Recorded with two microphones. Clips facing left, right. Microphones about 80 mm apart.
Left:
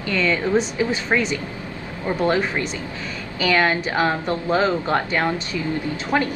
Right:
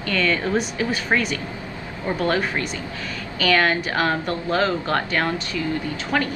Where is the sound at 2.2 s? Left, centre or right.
Left.